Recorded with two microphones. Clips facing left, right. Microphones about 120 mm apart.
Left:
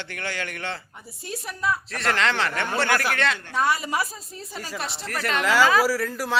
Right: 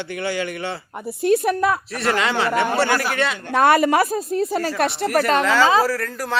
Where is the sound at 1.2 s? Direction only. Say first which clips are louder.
Right 11 dB; 60° right (ahead or behind).